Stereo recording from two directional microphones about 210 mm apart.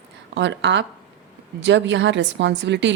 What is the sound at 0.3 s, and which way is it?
A woman's voice, 60° right (ahead or behind).